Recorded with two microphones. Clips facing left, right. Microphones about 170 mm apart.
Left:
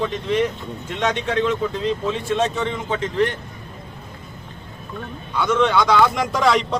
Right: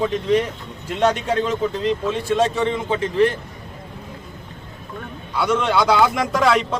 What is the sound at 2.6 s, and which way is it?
Speech, 30° right (ahead or behind).